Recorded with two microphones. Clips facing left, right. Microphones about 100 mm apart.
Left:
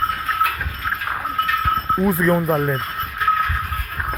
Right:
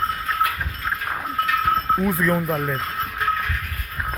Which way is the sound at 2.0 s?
25° left (ahead or behind).